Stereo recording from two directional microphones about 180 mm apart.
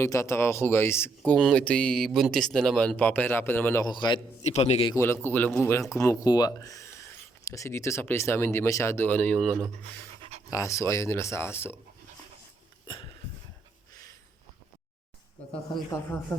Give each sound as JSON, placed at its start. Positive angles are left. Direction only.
{"t": 0.0, "sound": "speech", "side_deg": 15}
{"t": 3.8, "sound": "a man's voice", "side_deg": 25}
{"t": 4.4, "sound": "a man's voice", "side_deg": 35}
{"t": 4.9, "sound": "speech", "side_deg": 15}
{"t": 10.2, "sound": "pant", "side_deg": -35}
{"t": 10.5, "sound": "speech", "side_deg": 15}
{"t": 12.9, "sound": "a sound", "side_deg": 25}